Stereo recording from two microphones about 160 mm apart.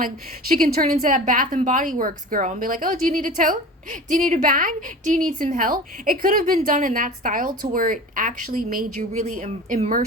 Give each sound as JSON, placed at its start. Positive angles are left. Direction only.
{"t": 0.0, "sound": "a woman's voice", "side_deg": -65}